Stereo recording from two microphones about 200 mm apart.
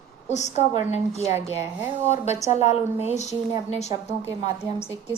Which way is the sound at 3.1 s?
35° left (ahead or behind).